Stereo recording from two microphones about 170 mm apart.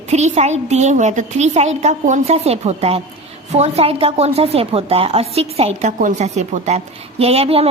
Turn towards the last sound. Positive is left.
turn(degrees=-35)  # may be behind; listen again after turning